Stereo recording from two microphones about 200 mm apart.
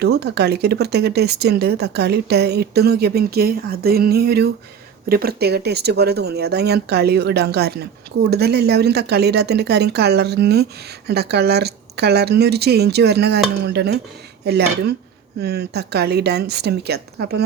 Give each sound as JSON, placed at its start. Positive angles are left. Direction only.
{"t": 0.0, "sound": "speech", "side_deg": -55}